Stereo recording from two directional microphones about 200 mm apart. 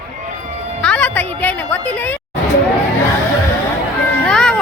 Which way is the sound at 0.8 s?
5° left (ahead or behind).